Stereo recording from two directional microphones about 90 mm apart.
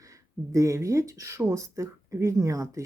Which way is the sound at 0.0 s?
35° right (ahead or behind).